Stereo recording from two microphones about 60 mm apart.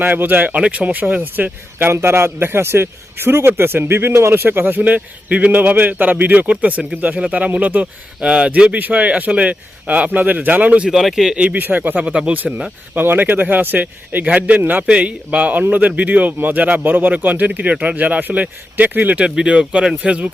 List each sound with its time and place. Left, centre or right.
0.0 s a man's voice: right
0.5 s speech: right
1.9 s a man's voice: right
10.8 s speech: centre
11.5 s speech: right
19.2 s speech: centre